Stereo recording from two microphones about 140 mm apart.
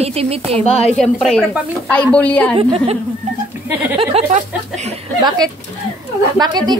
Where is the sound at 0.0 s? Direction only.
45° right (ahead or behind).